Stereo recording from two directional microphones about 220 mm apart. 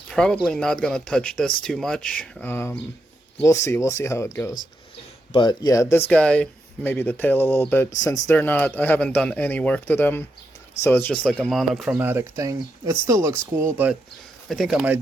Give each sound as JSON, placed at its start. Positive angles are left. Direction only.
{"t": 0.1, "sound": "speech", "side_deg": 5}
{"t": 14.4, "sound": "speech", "side_deg": 0}